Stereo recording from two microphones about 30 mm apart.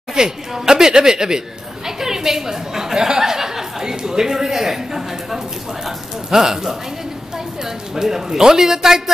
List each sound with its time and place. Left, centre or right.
0.1 s a man's voice: right